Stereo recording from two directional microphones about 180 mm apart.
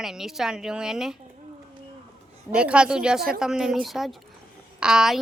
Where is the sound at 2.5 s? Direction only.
5° right (ahead or behind).